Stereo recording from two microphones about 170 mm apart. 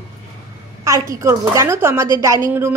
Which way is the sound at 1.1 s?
15° right (ahead or behind).